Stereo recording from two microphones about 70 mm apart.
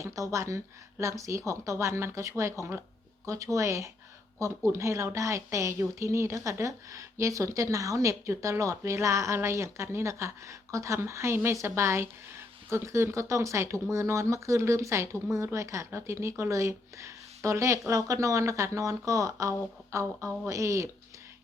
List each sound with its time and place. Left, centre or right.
0.0 s speech: right